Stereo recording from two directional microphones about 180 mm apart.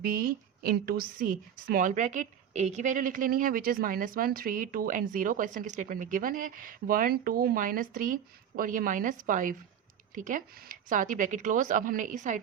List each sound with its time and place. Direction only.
0.0 s a woman's voice: 55° right (ahead or behind)